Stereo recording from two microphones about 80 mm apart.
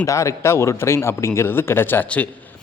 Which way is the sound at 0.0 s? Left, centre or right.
Left.